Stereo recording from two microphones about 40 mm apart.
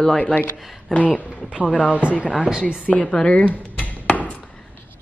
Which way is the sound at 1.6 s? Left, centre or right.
Right.